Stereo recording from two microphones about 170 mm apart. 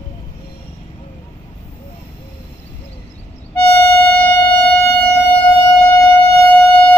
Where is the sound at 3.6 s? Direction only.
10° left (ahead or behind).